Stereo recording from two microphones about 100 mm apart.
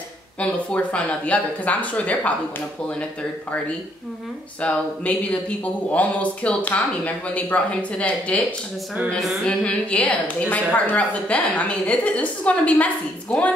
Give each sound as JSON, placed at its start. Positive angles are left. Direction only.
{"t": 0.4, "sound": "a woman's voice", "side_deg": 10}
{"t": 4.6, "sound": "a woman's voice", "side_deg": 10}
{"t": 9.1, "sound": "speech", "side_deg": 0}
{"t": 9.4, "sound": "a woman's voice", "side_deg": 10}